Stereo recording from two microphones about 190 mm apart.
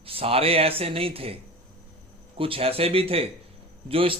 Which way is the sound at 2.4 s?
30° right (ahead or behind).